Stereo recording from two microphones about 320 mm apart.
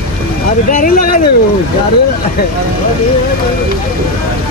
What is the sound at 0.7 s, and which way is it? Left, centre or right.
Speech, left.